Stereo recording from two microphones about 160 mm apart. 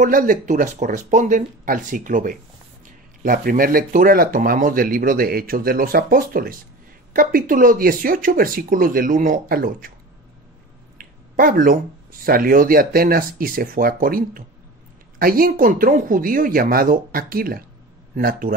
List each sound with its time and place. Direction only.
0.0 s speech: 60° right (ahead or behind)
11.0 s a sound: 60° right (ahead or behind)
12.3 s speech: 65° right (ahead or behind)